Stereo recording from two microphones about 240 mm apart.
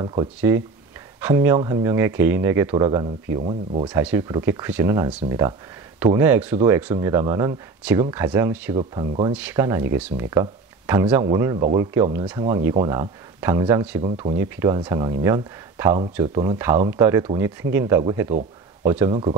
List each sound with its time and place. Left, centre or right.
0.0 s speech: centre
3.9 s speech: centre
8.7 s speech: right
9.3 s speech: centre